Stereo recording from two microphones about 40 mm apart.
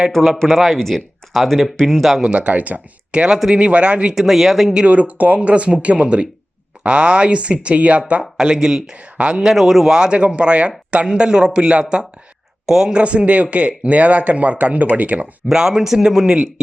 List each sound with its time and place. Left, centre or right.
0.1 s speech: centre
2.5 s speech: right
3.1 s speech: right
3.5 s speech: right
4.1 s speech: centre
4.9 s speech: right
9.3 s a man's voice: centre
9.9 s speech: right
10.2 s speech: right
12.6 s speech: centre
12.9 s speech: right
15.4 s a man's voice: centre